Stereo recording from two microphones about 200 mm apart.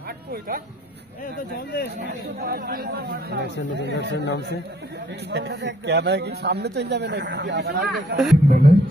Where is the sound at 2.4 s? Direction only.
50° right (ahead or behind).